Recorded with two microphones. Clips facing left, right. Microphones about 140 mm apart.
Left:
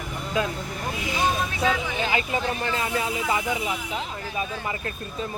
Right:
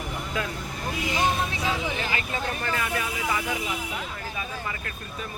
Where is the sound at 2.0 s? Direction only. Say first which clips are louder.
Left 4 dB; 20° left (ahead or behind).